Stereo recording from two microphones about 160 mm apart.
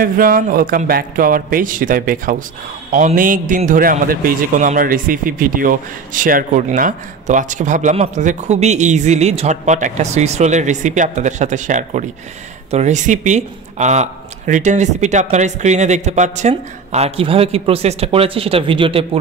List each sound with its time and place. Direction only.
0.0 s a man's voice: 65° right (ahead or behind); by 19.0 s 35° right (ahead or behind)